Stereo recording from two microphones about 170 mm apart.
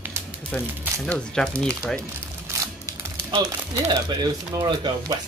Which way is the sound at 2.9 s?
30° right (ahead or behind).